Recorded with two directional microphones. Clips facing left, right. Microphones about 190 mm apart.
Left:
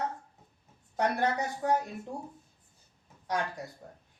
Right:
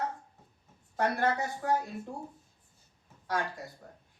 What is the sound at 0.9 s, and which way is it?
Speech, 20° left (ahead or behind).